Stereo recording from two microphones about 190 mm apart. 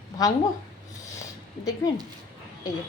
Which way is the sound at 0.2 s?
20° left (ahead or behind).